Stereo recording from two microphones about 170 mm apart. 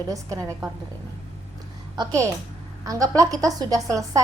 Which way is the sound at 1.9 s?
15° right (ahead or behind).